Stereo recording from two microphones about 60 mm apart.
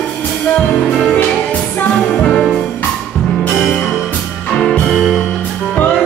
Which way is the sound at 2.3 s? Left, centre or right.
Centre.